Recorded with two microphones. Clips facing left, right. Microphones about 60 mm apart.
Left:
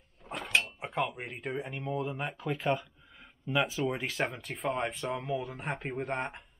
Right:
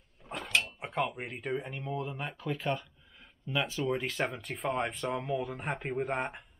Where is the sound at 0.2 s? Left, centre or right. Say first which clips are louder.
Left 1 dB; centre.